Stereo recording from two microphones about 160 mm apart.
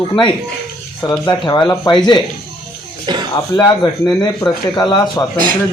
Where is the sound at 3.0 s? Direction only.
25° right (ahead or behind).